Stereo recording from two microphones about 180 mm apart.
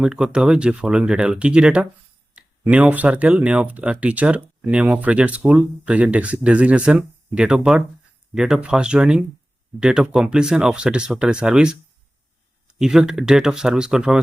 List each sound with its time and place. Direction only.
0.0 s speech: 5° right (ahead or behind)
12.8 s speech: 5° right (ahead or behind)